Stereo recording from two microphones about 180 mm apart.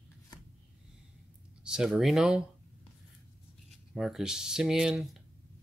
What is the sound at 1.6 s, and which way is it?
Speech, 5° right (ahead or behind).